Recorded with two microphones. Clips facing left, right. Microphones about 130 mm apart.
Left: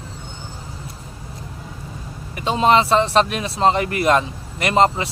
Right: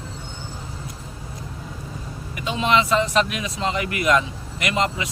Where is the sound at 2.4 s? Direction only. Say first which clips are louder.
Left 5 dB; 35° left (ahead or behind).